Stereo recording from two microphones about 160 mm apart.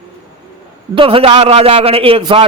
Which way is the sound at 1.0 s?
35° right (ahead or behind).